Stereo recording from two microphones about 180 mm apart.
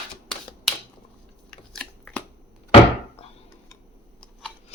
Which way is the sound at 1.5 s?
5° left (ahead or behind).